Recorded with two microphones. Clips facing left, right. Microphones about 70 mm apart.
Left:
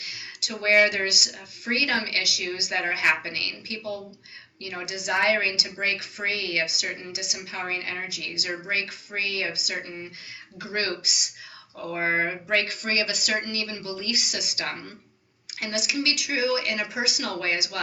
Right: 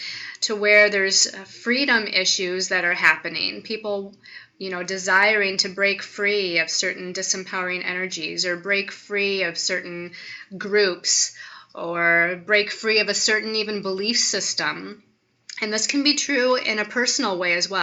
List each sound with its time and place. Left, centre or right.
0.0 s speech: right